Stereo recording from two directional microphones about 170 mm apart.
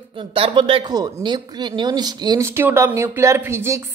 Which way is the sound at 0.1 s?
30° right (ahead or behind).